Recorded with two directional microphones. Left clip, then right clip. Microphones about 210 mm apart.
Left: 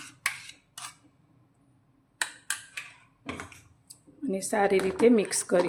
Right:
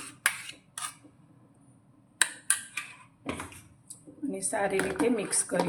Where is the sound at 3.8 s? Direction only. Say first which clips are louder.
Left 2 dB; 50° left (ahead or behind).